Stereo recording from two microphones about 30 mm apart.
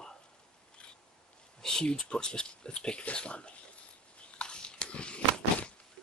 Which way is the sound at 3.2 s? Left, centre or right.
Left.